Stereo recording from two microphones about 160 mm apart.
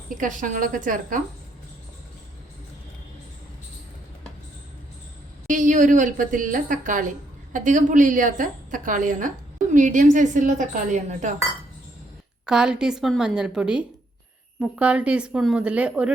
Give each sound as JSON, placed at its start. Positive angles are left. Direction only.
{"t": 0.1, "sound": "a woman's voice", "side_deg": -55}
{"t": 5.5, "sound": "a woman's voice", "side_deg": -55}
{"t": 12.5, "sound": "a woman's voice", "side_deg": -5}